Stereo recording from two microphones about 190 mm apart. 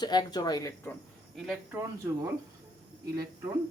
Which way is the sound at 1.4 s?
Centre (ahead or behind).